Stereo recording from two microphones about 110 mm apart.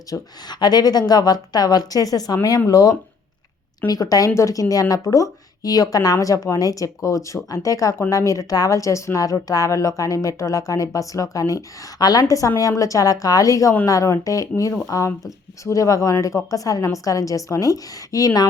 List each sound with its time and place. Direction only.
0.1 s speech: 40° left (ahead or behind)